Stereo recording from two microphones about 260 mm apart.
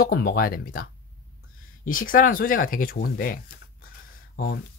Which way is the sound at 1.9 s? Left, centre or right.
Left.